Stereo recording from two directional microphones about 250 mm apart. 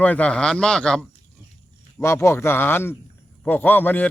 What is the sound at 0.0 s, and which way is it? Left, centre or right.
A man's voice, centre.